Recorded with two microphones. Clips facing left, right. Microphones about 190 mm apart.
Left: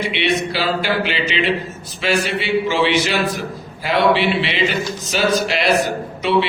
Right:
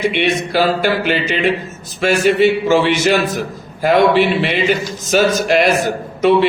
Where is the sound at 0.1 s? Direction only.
50° right (ahead or behind).